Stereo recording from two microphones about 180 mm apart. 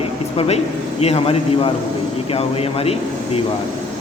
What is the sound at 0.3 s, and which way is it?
Speech, 35° left (ahead or behind).